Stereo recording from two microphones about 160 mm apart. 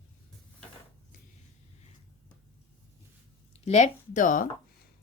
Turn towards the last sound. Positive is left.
turn(degrees=55)  # may be behind; listen again after turning